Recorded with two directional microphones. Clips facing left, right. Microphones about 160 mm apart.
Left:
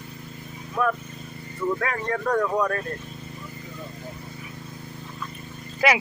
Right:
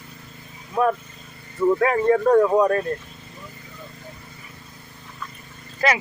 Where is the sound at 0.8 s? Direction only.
30° right (ahead or behind).